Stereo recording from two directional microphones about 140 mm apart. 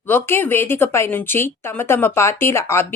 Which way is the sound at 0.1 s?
15° left (ahead or behind).